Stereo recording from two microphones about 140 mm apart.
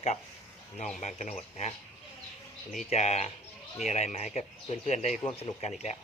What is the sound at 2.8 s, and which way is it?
Speech, 50° left (ahead or behind).